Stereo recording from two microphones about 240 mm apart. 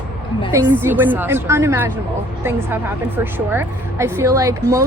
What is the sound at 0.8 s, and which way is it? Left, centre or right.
A woman's voice, centre.